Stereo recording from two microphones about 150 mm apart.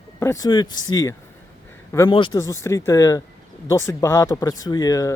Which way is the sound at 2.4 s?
20° left (ahead or behind).